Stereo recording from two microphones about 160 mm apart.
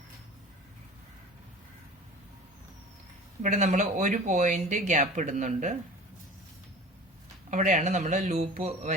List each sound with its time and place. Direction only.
3.4 s speech: 50° right (ahead or behind)
7.5 s speech: 50° right (ahead or behind)